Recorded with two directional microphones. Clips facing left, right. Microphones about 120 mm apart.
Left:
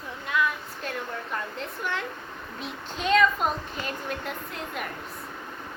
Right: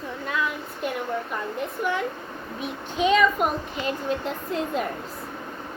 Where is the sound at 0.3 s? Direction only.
30° right (ahead or behind).